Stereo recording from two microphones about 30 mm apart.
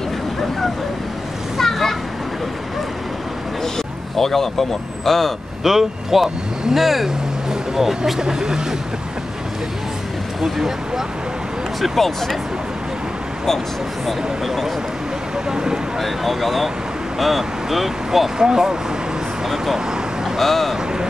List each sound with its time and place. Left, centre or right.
1.6 s children playing: centre
3.6 s speech: centre
5.6 s speech: centre
8.2 s speech: right
10.4 s speech: centre
12.0 s speech: centre
14.0 s speech: centre
15.3 s vehicle: right
16.0 s speech: centre
20.3 s speech: centre